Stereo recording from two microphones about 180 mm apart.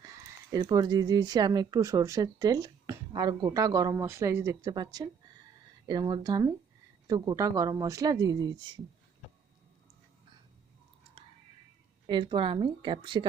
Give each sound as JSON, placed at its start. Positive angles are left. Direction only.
{"t": 0.5, "sound": "a woman's voice", "side_deg": -20}
{"t": 11.2, "sound": "whispering", "side_deg": -30}
{"t": 12.0, "sound": "a woman's voice", "side_deg": -25}